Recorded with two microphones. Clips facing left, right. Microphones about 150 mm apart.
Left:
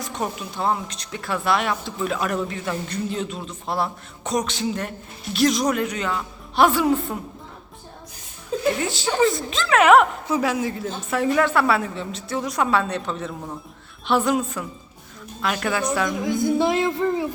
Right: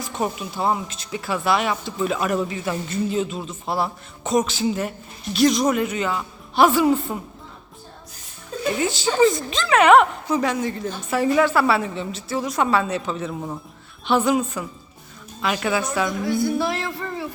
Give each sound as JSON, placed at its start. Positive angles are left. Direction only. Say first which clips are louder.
{"t": 0.0, "sound": "speech", "louder": "right 2 dB", "side_deg": -5}
{"t": 8.6, "sound": "speech", "louder": "right 1 dB", "side_deg": 0}
{"t": 16.2, "sound": "speech", "louder": "left 3 dB", "side_deg": 20}